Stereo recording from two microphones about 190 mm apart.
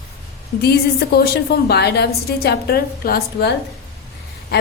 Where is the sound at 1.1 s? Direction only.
55° left (ahead or behind).